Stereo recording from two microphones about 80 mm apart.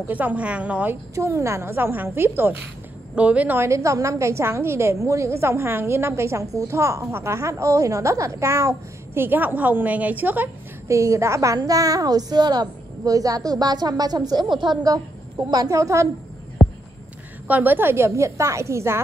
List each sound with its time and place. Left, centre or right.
0.1 s a woman's voice: centre
1.1 s a woman's voice: right
3.2 s a woman's voice: centre
3.5 s a woman's voice: right
9.2 s a woman's voice: right
10.9 s a woman's voice: right
15.5 s a woman's voice: right
16.6 s a sound: centre
17.5 s a woman's voice: right